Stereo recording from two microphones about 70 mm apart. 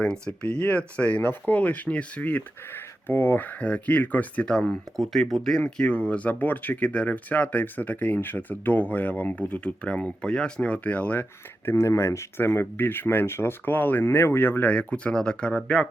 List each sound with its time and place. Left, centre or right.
0.0 s speech: centre
5.7 s speech: centre; by 11.9 s left
11.9 s speech: left; by 15.9 s centre